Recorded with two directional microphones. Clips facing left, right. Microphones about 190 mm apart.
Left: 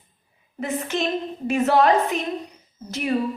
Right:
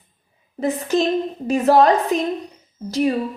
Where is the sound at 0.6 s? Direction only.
35° right (ahead or behind).